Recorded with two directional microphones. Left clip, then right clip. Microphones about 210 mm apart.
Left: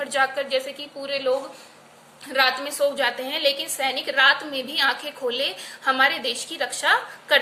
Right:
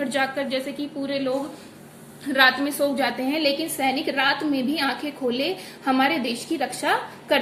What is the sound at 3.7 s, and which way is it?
A woman's voice, 30° left (ahead or behind).